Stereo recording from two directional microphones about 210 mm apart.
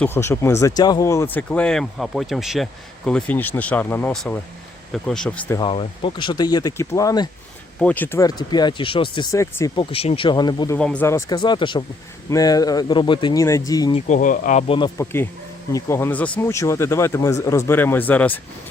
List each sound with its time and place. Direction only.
0.0 s speech: 10° left (ahead or behind)
5.5 s speech: 25° left (ahead or behind)
10.8 s speech: 5° left (ahead or behind)
13.9 s speech: 35° left (ahead or behind)
14.7 s speech: 20° left (ahead or behind)